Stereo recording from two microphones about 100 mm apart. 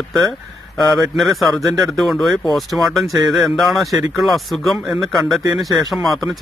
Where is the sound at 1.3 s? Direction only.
Centre (ahead or behind).